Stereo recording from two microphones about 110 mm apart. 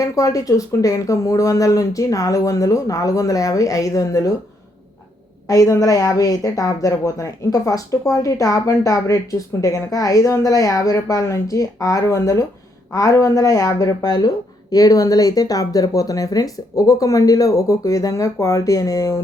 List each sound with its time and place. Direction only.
0.0 s a woman's voice: 30° left (ahead or behind)
5.5 s a woman's voice: 30° left (ahead or behind)